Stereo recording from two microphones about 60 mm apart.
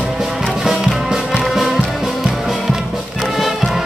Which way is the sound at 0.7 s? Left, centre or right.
Centre.